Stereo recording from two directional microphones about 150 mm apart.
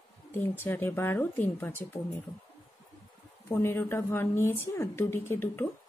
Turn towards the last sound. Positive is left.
turn(degrees=15)  # may be behind; listen again after turning